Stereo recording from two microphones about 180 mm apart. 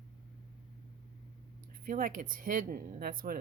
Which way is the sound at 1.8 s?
50° right (ahead or behind).